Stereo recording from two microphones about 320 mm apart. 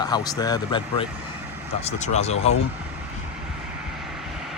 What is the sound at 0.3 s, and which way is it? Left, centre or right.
Speech, centre.